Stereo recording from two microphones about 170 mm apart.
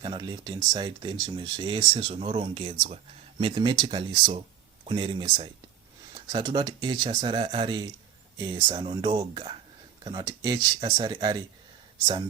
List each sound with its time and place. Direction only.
0.0 s speech: 25° right (ahead or behind)